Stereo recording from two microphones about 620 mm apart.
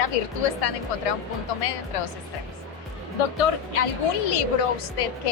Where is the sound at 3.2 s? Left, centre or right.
Left.